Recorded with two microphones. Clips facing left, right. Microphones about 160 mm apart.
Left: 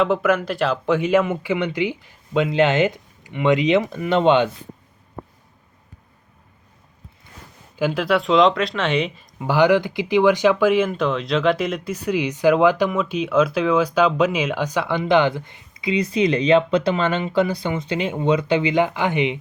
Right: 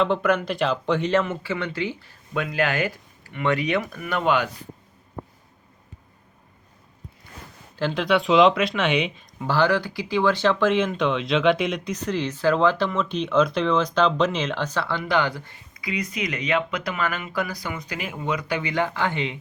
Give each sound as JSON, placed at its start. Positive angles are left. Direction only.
{"t": 0.0, "sound": "speech", "side_deg": 5}
{"t": 7.8, "sound": "speech", "side_deg": 5}
{"t": 9.5, "sound": "speech", "side_deg": 15}